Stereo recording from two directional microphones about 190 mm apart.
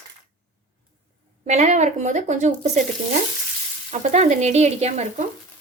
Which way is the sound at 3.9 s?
40° right (ahead or behind).